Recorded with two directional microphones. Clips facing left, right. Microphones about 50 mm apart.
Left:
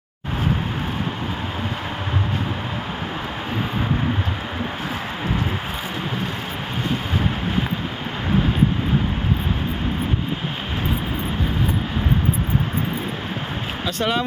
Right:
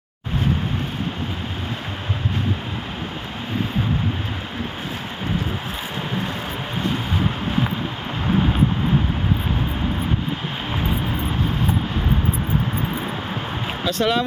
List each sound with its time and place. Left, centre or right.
13.8 s speech: centre